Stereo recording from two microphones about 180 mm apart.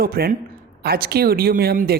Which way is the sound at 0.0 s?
55° right (ahead or behind).